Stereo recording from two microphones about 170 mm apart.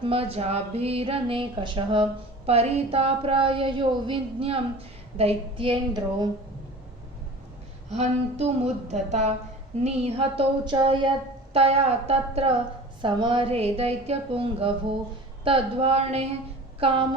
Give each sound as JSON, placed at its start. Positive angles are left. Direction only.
{"t": 0.0, "sound": "speech", "side_deg": -35}
{"t": 7.9, "sound": "speech", "side_deg": -40}